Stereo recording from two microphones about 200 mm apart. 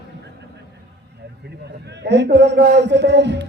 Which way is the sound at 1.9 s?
60° right (ahead or behind).